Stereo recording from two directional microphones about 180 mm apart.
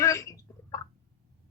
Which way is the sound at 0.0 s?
15° left (ahead or behind).